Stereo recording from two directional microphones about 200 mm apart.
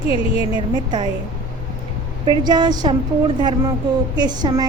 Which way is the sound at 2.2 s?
20° right (ahead or behind).